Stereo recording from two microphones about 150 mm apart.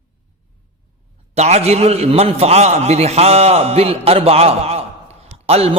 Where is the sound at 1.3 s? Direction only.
45° right (ahead or behind).